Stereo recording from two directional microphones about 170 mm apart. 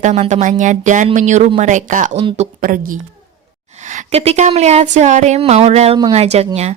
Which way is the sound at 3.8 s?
40° right (ahead or behind).